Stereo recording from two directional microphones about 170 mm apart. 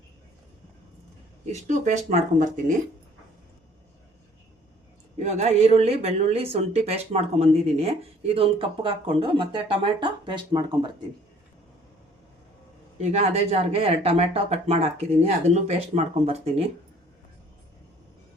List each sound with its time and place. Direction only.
1.5 s speech: 45° right (ahead or behind)
5.2 s speech: 40° right (ahead or behind); by 10.9 s 25° right (ahead or behind)
13.0 s speech: 40° right (ahead or behind)